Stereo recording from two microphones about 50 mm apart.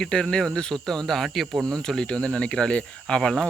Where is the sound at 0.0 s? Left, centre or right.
Centre.